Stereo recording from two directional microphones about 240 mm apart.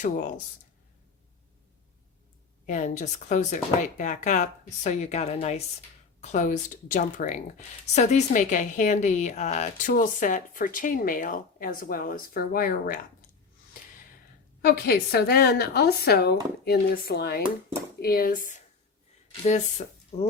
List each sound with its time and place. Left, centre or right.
0.0 s speech: left
2.6 s speech: left
14.6 s speech: left
20.1 s speech: left